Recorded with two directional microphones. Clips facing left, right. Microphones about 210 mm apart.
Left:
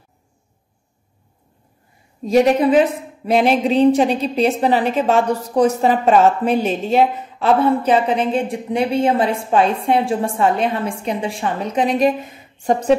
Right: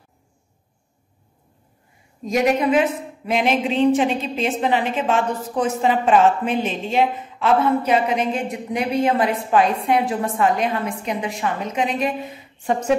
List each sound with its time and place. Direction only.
2.2 s a woman's voice: 30° left (ahead or behind)